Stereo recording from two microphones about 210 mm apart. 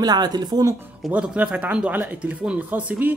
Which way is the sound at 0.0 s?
20° right (ahead or behind).